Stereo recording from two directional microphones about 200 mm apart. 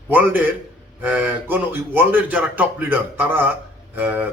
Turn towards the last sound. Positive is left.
turn(degrees=-10)  # may be behind; listen again after turning